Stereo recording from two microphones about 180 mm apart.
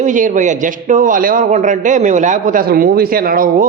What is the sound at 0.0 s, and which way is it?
A man's voice, 45° right (ahead or behind).